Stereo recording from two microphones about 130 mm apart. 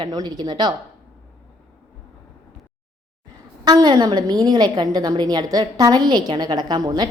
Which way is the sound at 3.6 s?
30° right (ahead or behind).